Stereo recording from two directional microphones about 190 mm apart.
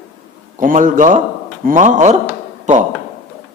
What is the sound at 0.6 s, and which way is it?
A man's voice, 45° right (ahead or behind).